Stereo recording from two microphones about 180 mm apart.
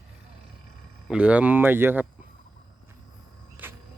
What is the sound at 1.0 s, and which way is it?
Speech, 5° right (ahead or behind).